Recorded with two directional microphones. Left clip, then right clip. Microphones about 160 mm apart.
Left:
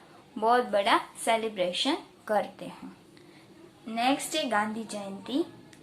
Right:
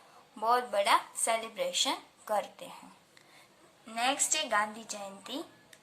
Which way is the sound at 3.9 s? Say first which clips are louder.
Left 3 dB; 25° right (ahead or behind).